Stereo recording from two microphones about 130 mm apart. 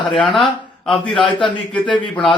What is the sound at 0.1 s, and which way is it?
A man's voice, centre (ahead or behind).